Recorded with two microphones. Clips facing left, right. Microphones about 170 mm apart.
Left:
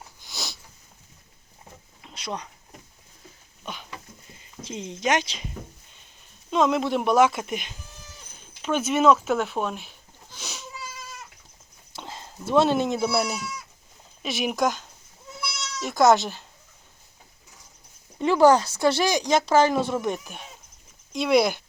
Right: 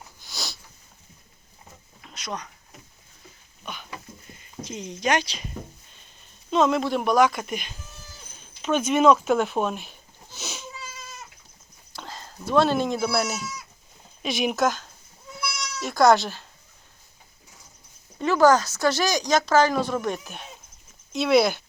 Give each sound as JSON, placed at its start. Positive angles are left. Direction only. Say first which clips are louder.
{"t": 0.2, "sound": "a sound", "louder": "even", "side_deg": 20}
{"t": 2.0, "sound": "a sound", "louder": "left 1 dB", "side_deg": 25}
{"t": 4.6, "sound": "speech", "louder": "even", "side_deg": 25}
{"t": 8.6, "sound": "speech", "louder": "right 1 dB", "side_deg": 5}
{"t": 10.3, "sound": "cat", "louder": "right 3 dB", "side_deg": 0}
{"t": 11.9, "sound": "speech", "louder": "even", "side_deg": 20}
{"t": 14.2, "sound": "speech", "louder": "right 2 dB", "side_deg": 5}
{"t": 14.5, "sound": "speech", "louder": "right 1 dB", "side_deg": 15}
{"t": 18.2, "sound": "speech", "louder": "left 1 dB", "side_deg": 25}